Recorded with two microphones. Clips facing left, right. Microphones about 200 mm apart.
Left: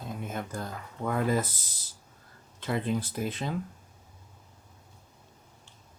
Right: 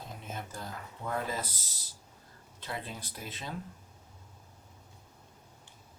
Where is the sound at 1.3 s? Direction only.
50° left (ahead or behind).